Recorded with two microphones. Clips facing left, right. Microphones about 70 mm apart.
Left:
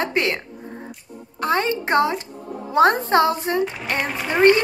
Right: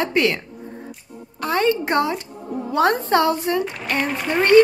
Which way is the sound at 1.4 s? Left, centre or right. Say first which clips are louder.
Right 1 dB; left.